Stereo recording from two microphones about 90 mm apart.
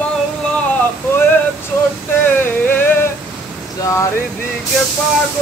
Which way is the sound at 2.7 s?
20° left (ahead or behind).